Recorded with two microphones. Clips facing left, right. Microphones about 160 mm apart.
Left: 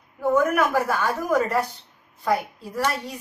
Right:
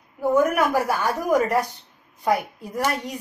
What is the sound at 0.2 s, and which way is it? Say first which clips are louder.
Speech: right 1 dB; 15° right (ahead or behind).